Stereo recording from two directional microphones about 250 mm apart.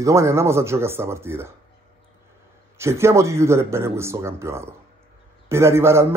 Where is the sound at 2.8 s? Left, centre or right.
Centre.